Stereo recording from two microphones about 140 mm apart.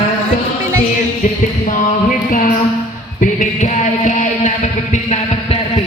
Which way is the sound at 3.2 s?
60° left (ahead or behind).